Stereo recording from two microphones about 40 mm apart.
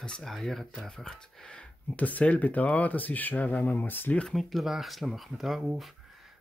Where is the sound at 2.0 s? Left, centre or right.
Left.